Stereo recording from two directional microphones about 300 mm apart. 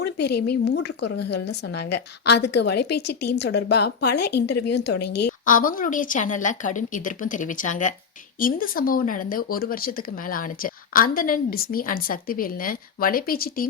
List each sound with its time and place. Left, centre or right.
0.0 s speech: left